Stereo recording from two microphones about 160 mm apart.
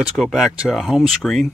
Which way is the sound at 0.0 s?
Centre (ahead or behind).